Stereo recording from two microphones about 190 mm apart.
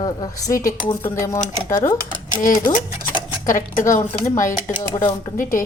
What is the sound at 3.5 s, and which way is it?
Speech, 45° left (ahead or behind).